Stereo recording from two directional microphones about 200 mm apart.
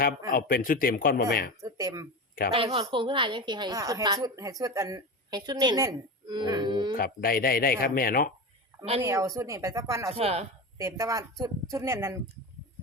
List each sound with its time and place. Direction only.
0.3 s speech: 45° left (ahead or behind)
1.6 s speech: 15° right (ahead or behind)
2.5 s a woman's voice: 25° right (ahead or behind)
6.9 s speech: 45° left (ahead or behind)
9.0 s speech: 15° right (ahead or behind)
10.2 s speech: 30° right (ahead or behind)
10.8 s speech: 15° right (ahead or behind)